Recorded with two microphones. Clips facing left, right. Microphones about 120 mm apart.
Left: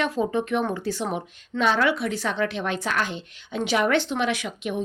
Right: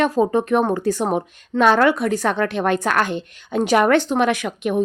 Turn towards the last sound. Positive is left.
turn(degrees=-50)  # may be behind; listen again after turning